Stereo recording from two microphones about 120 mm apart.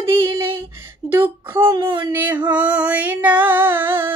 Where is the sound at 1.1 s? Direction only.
20° right (ahead or behind).